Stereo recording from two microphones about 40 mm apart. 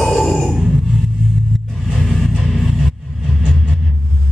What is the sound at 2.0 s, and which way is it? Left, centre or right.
Music, centre.